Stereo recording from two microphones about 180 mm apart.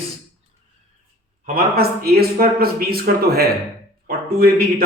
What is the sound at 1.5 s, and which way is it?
Speech, 60° right (ahead or behind).